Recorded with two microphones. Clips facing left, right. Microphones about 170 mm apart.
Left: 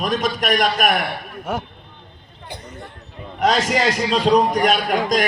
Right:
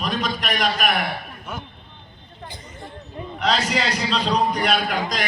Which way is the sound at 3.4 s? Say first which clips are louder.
Left 5 dB; 45° left (ahead or behind).